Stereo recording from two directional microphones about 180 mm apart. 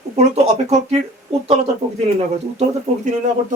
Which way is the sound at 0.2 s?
40° right (ahead or behind).